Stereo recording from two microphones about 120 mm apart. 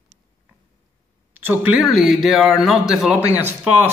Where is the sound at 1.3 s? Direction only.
15° right (ahead or behind).